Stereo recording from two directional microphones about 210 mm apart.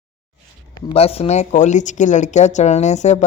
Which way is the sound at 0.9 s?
30° left (ahead or behind).